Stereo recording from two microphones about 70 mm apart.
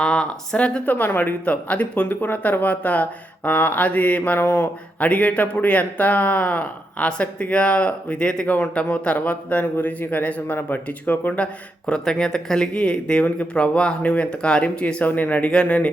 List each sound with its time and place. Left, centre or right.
0.0 s speech: centre; by 11.4 s left
11.9 s speech: centre